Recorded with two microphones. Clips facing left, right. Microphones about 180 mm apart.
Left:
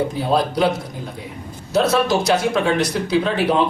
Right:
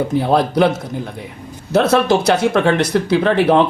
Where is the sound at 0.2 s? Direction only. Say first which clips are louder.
Right 5 dB; 60° right (ahead or behind).